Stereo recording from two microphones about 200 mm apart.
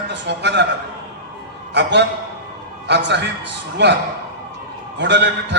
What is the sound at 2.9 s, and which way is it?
Speech, 60° right (ahead or behind).